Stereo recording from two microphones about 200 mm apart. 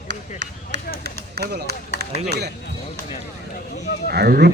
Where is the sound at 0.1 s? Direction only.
60° right (ahead or behind).